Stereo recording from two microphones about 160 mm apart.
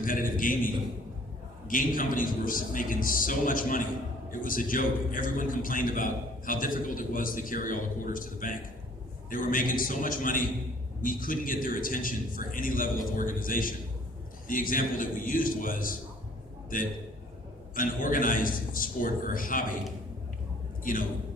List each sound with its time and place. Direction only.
0.0 s a man's voice: 60° left (ahead or behind)
20.9 s a man's voice: 60° left (ahead or behind)